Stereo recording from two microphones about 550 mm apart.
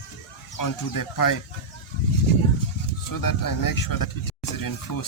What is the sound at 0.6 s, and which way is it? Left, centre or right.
Speech, left.